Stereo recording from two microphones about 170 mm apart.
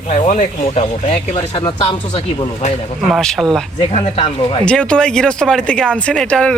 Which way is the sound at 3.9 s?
30° left (ahead or behind).